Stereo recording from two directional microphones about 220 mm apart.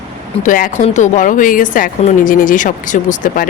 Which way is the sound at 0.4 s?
35° left (ahead or behind).